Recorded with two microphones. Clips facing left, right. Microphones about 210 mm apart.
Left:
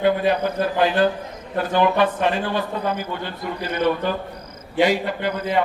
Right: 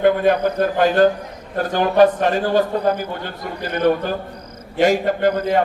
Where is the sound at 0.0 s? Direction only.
50° right (ahead or behind).